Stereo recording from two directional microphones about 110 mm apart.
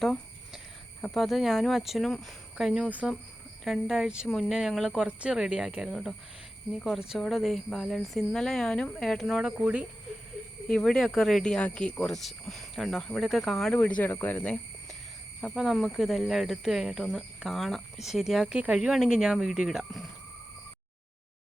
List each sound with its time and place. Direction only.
0.0 s a sound: centre (ahead or behind)
1.1 s speech: centre (ahead or behind)
9.6 s speech: 10° right (ahead or behind)
10.7 s speech: 5° left (ahead or behind)
13.7 s speech: 15° left (ahead or behind)
15.5 s speech: centre (ahead or behind)